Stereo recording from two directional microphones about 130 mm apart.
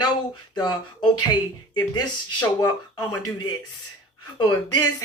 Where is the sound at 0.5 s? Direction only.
35° left (ahead or behind).